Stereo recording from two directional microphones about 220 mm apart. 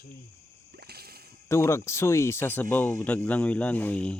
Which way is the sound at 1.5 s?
10° left (ahead or behind).